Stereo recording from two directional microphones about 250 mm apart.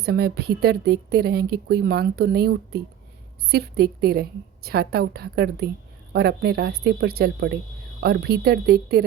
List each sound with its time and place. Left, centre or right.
0.0 s a woman's voice: right